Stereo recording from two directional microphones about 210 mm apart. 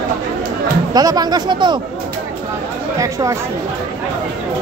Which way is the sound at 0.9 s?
20° right (ahead or behind).